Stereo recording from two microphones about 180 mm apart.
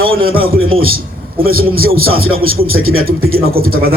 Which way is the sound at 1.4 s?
55° right (ahead or behind).